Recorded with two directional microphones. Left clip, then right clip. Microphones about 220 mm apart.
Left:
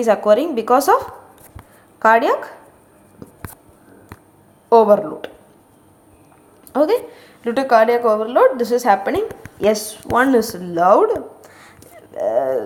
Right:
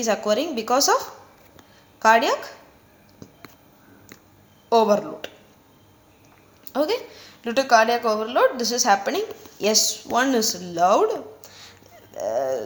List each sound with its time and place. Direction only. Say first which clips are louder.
0.0 s a woman's voice: left 8 dB; 25° left (ahead or behind)
1.5 s a sound: left 5 dB; 25° left (ahead or behind)
3.2 s whispering: left 6 dB; 20° left (ahead or behind)
4.7 s a woman's voice: left 7 dB; 25° left (ahead or behind)
6.7 s a woman's voice: left 7 dB; 20° left (ahead or behind)